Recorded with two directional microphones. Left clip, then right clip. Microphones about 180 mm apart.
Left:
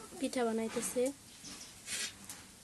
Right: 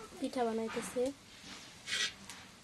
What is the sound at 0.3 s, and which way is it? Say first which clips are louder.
Speech: even; 20° left (ahead or behind).